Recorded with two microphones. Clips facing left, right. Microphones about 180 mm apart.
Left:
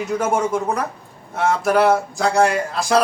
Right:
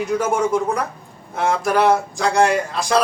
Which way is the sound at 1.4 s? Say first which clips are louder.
Left 1 dB; centre (ahead or behind).